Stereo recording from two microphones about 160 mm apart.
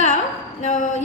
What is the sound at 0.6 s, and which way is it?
Speech, 50° left (ahead or behind).